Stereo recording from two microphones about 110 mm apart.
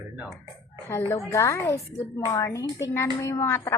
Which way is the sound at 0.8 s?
25° left (ahead or behind).